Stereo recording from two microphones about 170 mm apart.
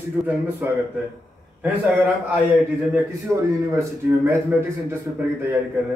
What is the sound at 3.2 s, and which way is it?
Speech, 15° right (ahead or behind).